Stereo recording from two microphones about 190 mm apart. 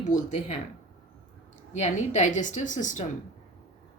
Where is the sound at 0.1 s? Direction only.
35° left (ahead or behind).